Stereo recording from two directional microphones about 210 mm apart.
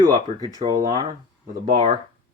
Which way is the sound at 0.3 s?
20° right (ahead or behind).